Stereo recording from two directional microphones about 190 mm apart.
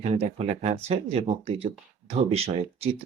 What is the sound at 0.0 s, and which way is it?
Speech, 35° right (ahead or behind).